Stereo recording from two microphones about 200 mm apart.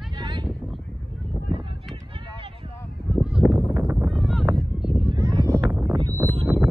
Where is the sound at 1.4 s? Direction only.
25° right (ahead or behind).